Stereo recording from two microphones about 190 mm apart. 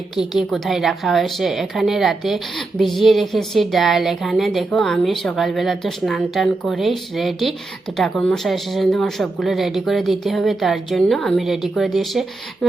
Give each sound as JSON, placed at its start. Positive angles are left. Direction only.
{"t": 0.2, "sound": "a woman's voice", "side_deg": 0}